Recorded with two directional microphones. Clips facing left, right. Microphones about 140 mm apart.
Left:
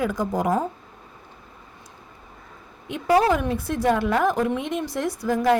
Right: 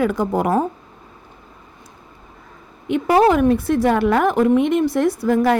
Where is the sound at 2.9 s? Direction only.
60° right (ahead or behind).